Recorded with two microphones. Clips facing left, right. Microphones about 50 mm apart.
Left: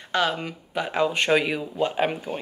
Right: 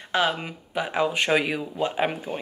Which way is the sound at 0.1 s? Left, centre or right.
Centre.